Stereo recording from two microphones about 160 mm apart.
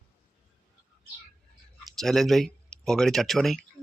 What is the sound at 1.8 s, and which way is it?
Speech, centre (ahead or behind).